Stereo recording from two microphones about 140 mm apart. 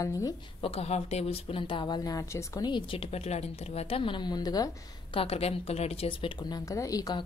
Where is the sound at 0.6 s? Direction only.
45° left (ahead or behind); by 5.2 s 25° left (ahead or behind).